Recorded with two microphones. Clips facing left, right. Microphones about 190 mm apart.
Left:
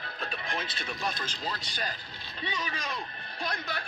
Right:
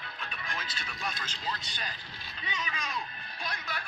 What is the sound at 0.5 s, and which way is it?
Speech, 35° left (ahead or behind).